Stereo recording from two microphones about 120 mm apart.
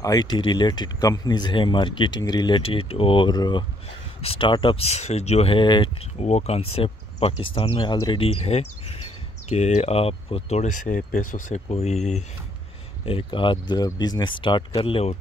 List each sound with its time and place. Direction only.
0.0 s speech: 35° left (ahead or behind)
4.2 s speech: 50° left (ahead or behind)
6.2 s speech: 65° left (ahead or behind)
13.0 s speech: 45° left (ahead or behind)
14.8 s speech: 50° left (ahead or behind)